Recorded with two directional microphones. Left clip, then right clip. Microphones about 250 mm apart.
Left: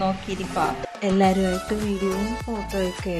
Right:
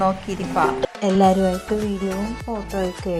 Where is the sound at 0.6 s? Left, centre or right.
Centre.